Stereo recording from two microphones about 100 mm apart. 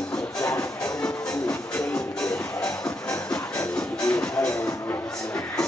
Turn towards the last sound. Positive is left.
turn(degrees=10)  # may be behind; listen again after turning